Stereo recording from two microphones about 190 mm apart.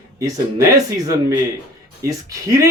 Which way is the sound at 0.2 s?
20° right (ahead or behind).